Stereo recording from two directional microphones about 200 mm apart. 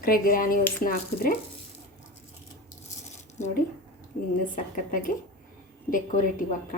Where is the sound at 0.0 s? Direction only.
45° left (ahead or behind).